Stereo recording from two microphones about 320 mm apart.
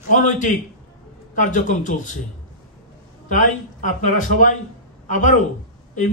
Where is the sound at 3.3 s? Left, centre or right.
Left.